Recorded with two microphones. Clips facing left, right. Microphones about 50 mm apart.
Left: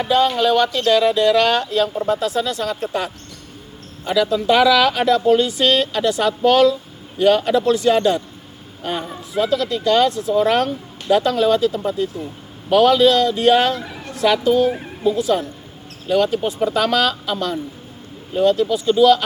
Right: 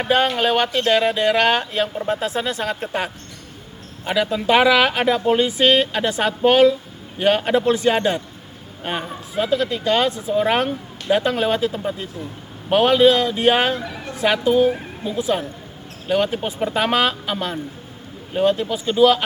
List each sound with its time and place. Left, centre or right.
0.0 s a man's voice: right; by 15.1 s centre
16.0 s speech: right